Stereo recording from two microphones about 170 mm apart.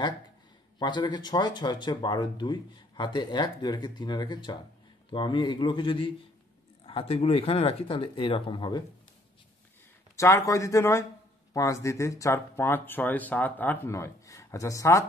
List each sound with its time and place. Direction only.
0.7 s speech: 25° left (ahead or behind)
10.1 s speech: 20° left (ahead or behind)